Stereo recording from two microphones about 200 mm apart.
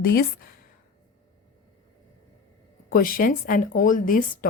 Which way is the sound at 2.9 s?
45° left (ahead or behind).